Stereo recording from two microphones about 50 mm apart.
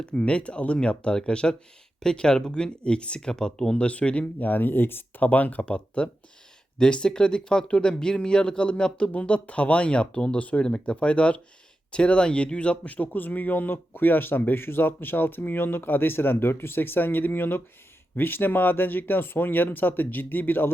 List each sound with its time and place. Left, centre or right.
0.0 s speech: left
3.8 s speech: left
5.2 s speech: left